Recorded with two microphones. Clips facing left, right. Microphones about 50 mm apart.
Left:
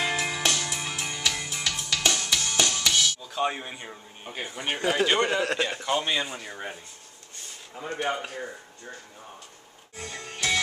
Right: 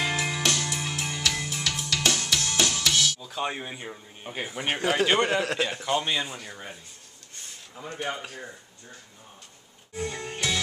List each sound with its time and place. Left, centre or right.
0.0 s music: centre
7.8 s speech: left
10.0 s music: centre